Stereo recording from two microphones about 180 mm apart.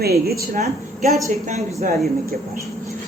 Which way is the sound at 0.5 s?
40° right (ahead or behind).